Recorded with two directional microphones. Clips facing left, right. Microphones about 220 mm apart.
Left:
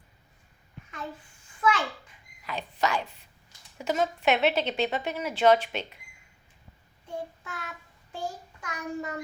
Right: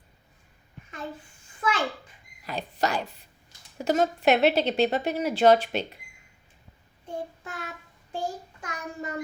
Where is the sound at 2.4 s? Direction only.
35° right (ahead or behind).